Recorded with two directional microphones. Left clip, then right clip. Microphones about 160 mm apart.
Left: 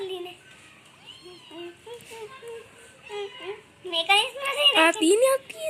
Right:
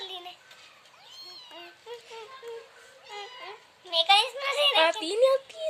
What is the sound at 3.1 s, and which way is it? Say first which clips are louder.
A child's voice: left 6 dB; 10° right (ahead or behind).